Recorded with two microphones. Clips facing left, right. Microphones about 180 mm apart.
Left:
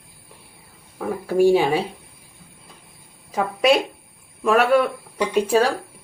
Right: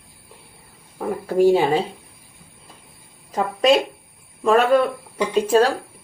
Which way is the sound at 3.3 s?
10° left (ahead or behind).